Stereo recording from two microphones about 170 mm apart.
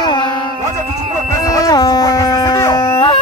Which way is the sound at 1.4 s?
20° left (ahead or behind).